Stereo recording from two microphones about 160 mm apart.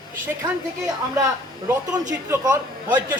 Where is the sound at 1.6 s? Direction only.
25° right (ahead or behind).